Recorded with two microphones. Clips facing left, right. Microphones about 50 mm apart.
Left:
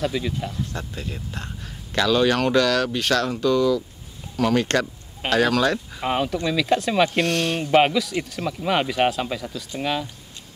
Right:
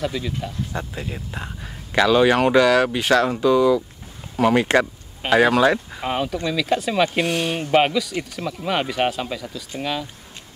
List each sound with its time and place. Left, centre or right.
0.0 s speech: centre
0.7 s speech: centre
6.0 s speech: centre